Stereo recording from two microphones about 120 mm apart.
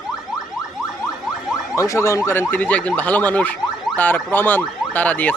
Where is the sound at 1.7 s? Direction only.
25° left (ahead or behind).